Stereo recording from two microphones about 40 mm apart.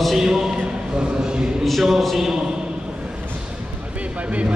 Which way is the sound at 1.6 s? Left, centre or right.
Centre.